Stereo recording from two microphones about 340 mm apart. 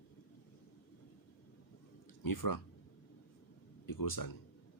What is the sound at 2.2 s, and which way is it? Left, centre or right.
Speech, left.